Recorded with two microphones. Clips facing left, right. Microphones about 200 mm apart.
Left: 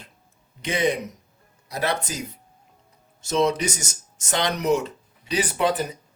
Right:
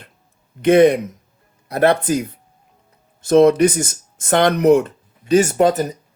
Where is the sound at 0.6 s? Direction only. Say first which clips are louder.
Right 12 dB; 55° right (ahead or behind).